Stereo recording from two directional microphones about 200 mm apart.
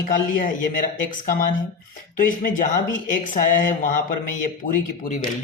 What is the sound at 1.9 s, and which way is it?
A man's voice, 40° left (ahead or behind).